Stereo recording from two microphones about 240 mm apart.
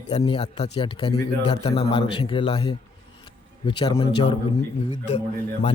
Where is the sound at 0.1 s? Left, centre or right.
Left.